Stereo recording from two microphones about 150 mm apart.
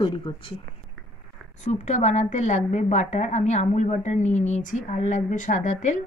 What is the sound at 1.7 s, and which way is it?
A woman's voice, 50° left (ahead or behind).